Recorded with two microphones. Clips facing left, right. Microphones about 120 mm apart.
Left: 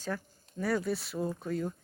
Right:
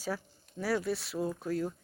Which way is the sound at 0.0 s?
5° right (ahead or behind).